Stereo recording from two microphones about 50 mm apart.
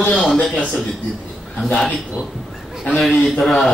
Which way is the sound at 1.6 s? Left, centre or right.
Centre.